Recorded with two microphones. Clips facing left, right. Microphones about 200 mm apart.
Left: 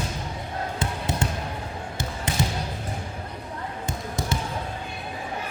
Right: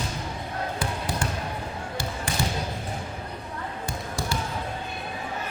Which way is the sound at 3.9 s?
20° left (ahead or behind).